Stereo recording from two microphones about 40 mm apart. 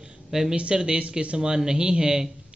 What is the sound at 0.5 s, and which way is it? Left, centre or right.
A man's voice, right.